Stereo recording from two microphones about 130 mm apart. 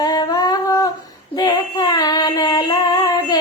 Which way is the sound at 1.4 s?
30° left (ahead or behind).